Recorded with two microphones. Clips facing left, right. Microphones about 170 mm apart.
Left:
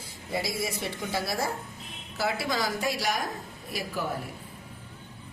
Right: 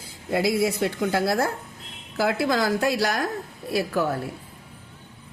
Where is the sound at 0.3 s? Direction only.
80° right.